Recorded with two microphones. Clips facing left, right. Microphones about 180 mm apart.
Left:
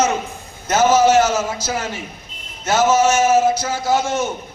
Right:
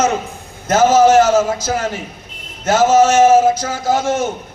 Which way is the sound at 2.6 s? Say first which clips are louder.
Right 4 dB; 50° right (ahead or behind).